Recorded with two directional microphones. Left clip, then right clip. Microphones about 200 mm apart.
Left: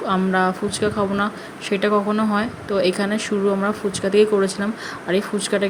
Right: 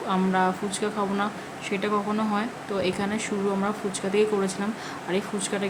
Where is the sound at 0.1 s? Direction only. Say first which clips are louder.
Left 4 dB; 20° left (ahead or behind).